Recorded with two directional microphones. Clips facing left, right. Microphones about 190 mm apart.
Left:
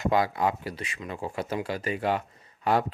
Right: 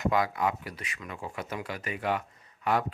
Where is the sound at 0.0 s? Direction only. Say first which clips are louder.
Left 2 dB; 30° left (ahead or behind).